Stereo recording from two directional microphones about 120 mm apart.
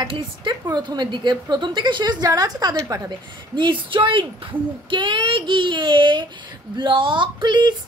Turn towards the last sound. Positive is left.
turn(degrees=-40)  # may be behind; listen again after turning